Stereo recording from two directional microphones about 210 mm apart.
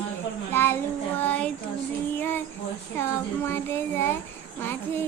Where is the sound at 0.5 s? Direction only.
10° left (ahead or behind).